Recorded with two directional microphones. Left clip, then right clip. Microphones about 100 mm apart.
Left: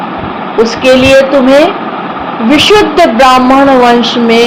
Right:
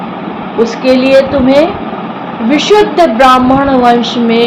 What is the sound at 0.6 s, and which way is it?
Speech, 90° left.